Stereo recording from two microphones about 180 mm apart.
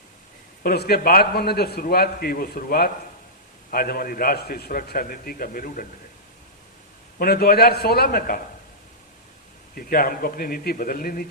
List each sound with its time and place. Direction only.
0.6 s a man's voice: 60° left (ahead or behind)
7.2 s a man's voice: 55° left (ahead or behind)
9.7 s a man's voice: 55° left (ahead or behind)